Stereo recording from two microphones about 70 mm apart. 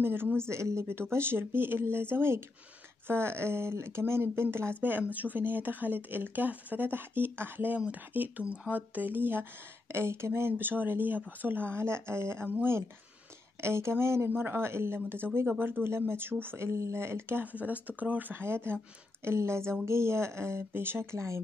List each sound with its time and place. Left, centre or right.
0.0 s speech: right